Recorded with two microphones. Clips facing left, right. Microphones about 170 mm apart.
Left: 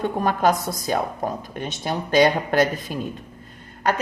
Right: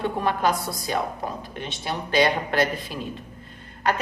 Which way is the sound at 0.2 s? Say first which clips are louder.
Left 5 dB; 45° left (ahead or behind).